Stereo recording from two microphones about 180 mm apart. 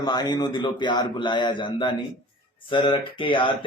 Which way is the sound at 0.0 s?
25° left (ahead or behind).